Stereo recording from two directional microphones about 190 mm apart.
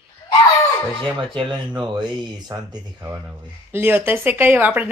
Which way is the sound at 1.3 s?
25° right (ahead or behind).